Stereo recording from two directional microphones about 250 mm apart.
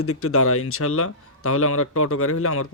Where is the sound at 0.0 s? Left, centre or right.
Left.